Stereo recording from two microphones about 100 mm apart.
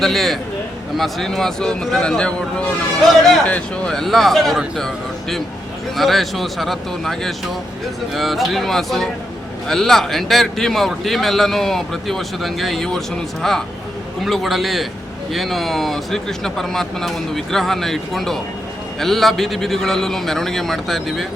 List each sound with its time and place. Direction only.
0.0 s speech: centre (ahead or behind)
6.0 s speech: centre (ahead or behind)